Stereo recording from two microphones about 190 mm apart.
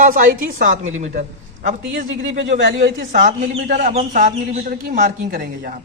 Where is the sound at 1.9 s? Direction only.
75° right (ahead or behind).